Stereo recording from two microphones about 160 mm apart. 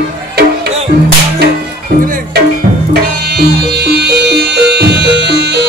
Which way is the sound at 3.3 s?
90° right.